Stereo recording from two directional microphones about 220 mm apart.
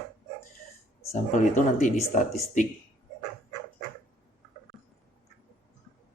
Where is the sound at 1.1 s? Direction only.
35° left (ahead or behind).